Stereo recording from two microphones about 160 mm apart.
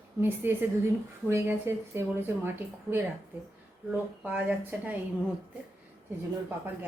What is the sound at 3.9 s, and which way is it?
Speech, 10° right (ahead or behind).